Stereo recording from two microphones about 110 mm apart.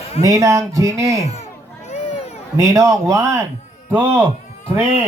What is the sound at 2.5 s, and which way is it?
Speech, 30° right (ahead or behind).